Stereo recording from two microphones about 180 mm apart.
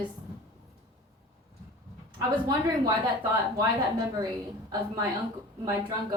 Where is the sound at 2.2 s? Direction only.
20° right (ahead or behind).